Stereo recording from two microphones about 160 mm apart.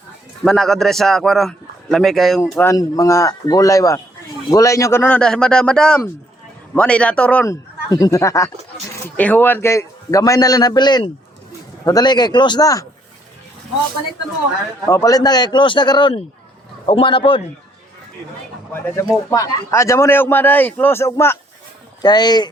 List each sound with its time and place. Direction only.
0.4 s a man's voice: 5° left (ahead or behind)
2.4 s a man's voice: 15° left (ahead or behind)
7.4 s a man's voice: 20° left (ahead or behind)
14.8 s a man's voice: 20° left (ahead or behind)
19.3 s a man's voice: 20° left (ahead or behind)